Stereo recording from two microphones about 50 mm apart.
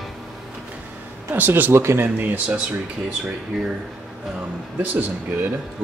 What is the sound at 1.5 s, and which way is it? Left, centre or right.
Speech, right.